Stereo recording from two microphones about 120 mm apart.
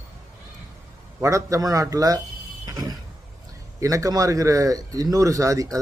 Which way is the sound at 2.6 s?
35° right (ahead or behind).